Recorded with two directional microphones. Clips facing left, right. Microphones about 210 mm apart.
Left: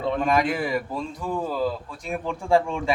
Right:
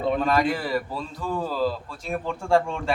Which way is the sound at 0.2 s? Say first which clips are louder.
Even; 15° left (ahead or behind).